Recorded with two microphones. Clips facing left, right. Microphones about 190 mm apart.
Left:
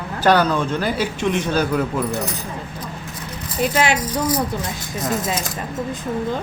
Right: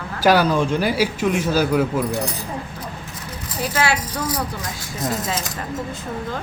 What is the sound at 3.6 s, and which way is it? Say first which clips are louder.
Speech: left 3 dB; 20° left (ahead or behind).